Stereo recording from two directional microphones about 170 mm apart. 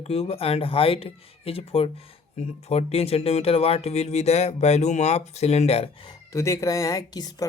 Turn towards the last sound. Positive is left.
turn(degrees=20)  # may be behind; listen again after turning